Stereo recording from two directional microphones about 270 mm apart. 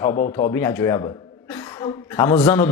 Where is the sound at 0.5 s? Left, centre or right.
Centre.